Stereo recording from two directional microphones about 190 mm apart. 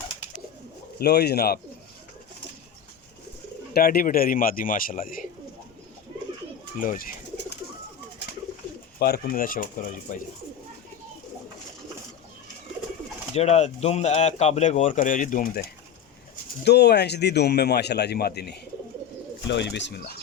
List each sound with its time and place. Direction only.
0.9 s speech: 60° left (ahead or behind)
3.7 s speech: 50° left (ahead or behind)
6.7 s bird: 45° left (ahead or behind)
9.0 s speech: 55° left (ahead or behind)
13.3 s speech: 35° left (ahead or behind)
16.3 s speech: 60° left (ahead or behind)
19.5 s speech: 70° left (ahead or behind)